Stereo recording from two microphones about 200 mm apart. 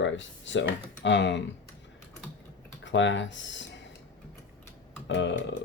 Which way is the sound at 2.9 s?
65° left (ahead or behind).